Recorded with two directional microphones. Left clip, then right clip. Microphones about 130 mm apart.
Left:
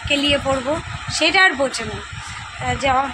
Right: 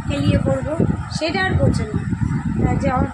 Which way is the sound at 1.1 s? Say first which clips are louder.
Left 9 dB; 15° left (ahead or behind).